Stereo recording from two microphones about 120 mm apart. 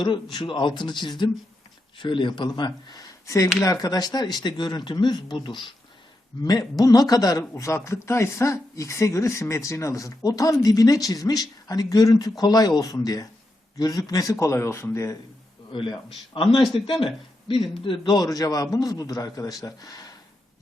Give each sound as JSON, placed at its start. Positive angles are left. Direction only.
{"t": 0.3, "sound": "a man's voice", "side_deg": 40}
{"t": 6.4, "sound": "a man's voice", "side_deg": 30}
{"t": 16.5, "sound": "speech", "side_deg": 0}
{"t": 16.8, "sound": "a man's voice", "side_deg": 45}